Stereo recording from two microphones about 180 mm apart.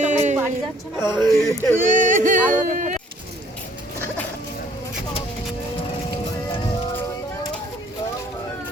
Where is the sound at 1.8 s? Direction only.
45° right (ahead or behind).